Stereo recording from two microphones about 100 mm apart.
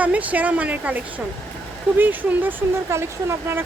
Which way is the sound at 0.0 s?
15° right (ahead or behind).